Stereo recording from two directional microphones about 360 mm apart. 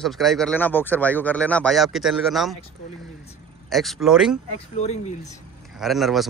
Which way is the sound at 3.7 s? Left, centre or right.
Centre.